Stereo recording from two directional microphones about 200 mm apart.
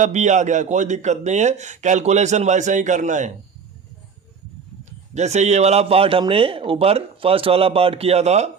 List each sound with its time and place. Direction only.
0.0 s a man's voice: 35° right (ahead or behind)
4.9 s a man's voice: 35° right (ahead or behind)